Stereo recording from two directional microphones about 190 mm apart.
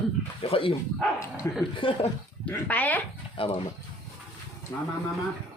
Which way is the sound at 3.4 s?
30° left (ahead or behind).